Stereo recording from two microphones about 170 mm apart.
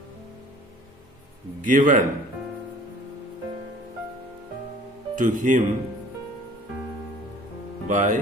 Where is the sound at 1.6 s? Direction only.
50° right (ahead or behind).